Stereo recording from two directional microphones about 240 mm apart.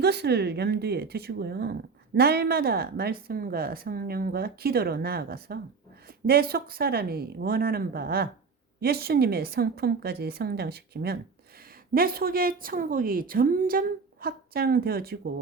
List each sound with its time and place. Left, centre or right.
0.0 s a woman's voice: right